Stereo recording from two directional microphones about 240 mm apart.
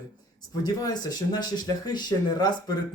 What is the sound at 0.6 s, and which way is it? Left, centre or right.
Speech, centre.